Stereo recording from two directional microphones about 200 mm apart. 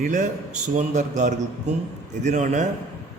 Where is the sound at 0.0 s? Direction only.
35° right (ahead or behind).